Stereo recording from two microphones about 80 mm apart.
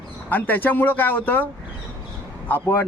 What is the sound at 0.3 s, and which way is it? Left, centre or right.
Speech, left.